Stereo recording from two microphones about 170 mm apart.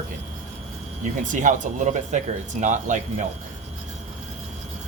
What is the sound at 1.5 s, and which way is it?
Speech, 50° right (ahead or behind).